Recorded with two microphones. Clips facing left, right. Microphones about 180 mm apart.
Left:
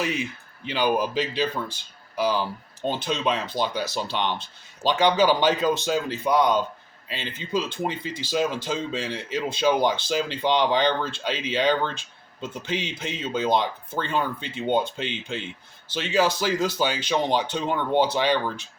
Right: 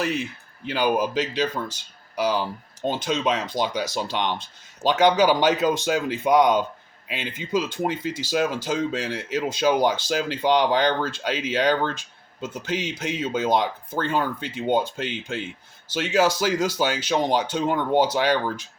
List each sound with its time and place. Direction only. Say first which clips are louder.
0.0 s speech: right 1 dB; centre (ahead or behind)
2.1 s speech: right 1 dB; 10° right (ahead or behind)